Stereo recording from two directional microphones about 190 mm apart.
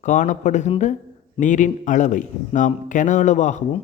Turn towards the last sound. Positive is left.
turn(degrees=40)  # may be behind; listen again after turning